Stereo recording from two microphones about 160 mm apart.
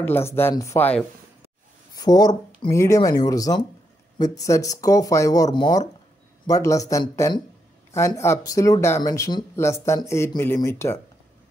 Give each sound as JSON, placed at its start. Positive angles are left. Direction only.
{"t": 0.0, "sound": "speech", "side_deg": 15}
{"t": 2.0, "sound": "speech", "side_deg": 25}